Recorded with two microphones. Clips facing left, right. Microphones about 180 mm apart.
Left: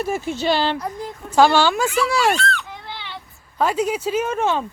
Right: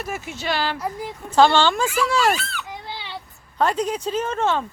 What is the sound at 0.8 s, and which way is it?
Speech, 5° right (ahead or behind).